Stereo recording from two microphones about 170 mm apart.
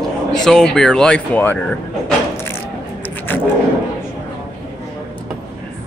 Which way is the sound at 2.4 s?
15° left (ahead or behind).